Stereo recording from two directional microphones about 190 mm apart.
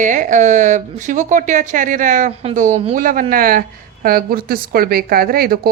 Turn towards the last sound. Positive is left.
turn(degrees=-55)  # may be behind; listen again after turning